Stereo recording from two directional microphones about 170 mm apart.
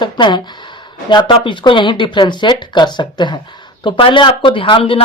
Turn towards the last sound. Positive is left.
turn(degrees=35)  # may be behind; listen again after turning